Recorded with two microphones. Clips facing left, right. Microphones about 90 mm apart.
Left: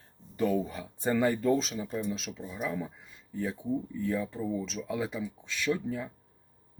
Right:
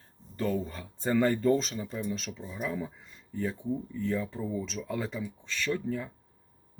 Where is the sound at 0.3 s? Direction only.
15° left (ahead or behind).